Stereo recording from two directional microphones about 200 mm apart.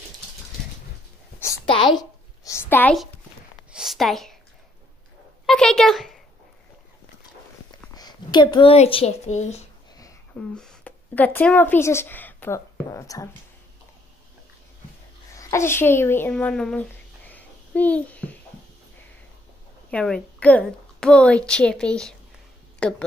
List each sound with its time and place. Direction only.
1.7 s a woman's voice: 25° left (ahead or behind); by 3.1 s 5° left (ahead or behind)
3.7 s a sound: centre (ahead or behind)
5.5 s a woman's voice: 5° left (ahead or behind)
7.9 s speech: 20° left (ahead or behind)
10.5 s speech: 5° left (ahead or behind)
15.3 s speech: 15° left (ahead or behind)
19.9 s a woman's voice: 5° left (ahead or behind)